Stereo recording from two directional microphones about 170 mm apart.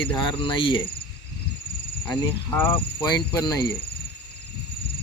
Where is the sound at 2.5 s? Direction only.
10° left (ahead or behind).